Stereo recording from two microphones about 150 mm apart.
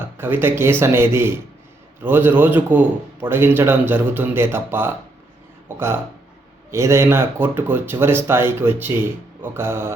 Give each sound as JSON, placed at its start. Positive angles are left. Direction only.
{"t": 0.2, "sound": "speech", "side_deg": -15}